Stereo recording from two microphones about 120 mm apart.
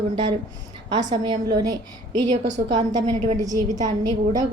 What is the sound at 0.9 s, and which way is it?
Speech, 35° right (ahead or behind).